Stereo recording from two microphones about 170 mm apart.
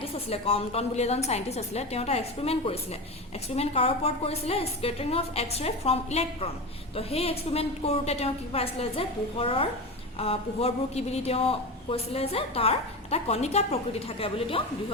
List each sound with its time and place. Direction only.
0.0 s a woman's voice: 35° left (ahead or behind)